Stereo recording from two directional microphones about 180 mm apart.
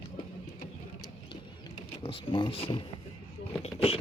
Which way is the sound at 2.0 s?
30° left (ahead or behind).